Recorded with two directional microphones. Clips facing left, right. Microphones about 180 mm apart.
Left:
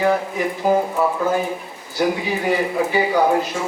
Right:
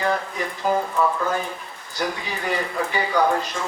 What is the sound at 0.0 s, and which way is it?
A man's voice, 15° left (ahead or behind).